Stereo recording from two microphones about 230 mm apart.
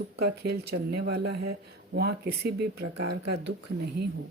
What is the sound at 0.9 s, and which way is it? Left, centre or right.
Speech, right.